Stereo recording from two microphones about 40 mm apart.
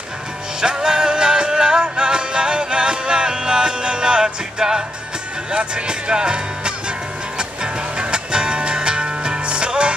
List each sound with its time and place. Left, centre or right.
0.6 s music: centre
5.5 s speech: right
7.3 s music: right